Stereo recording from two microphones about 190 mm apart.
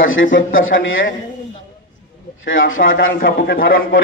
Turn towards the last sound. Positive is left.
turn(degrees=50)  # may be behind; listen again after turning